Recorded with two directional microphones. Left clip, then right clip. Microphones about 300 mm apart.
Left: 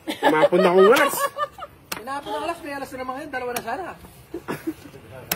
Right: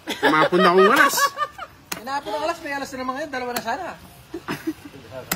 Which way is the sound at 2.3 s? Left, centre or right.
Right.